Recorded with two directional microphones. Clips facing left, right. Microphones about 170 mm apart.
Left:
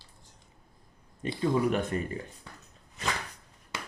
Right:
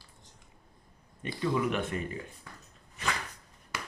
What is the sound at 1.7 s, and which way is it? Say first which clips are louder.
Speech: left 3 dB; 40° left (ahead or behind).